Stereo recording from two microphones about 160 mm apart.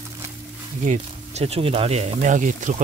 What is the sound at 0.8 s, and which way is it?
Speech, 45° right (ahead or behind).